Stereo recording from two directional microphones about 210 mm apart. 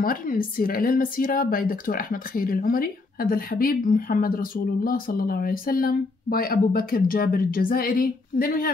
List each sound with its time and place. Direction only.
0.0 s speech: 40° left (ahead or behind)